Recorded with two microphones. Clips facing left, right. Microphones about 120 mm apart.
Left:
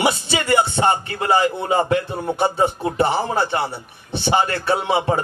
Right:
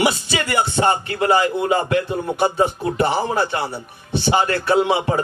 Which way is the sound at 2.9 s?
25° left (ahead or behind).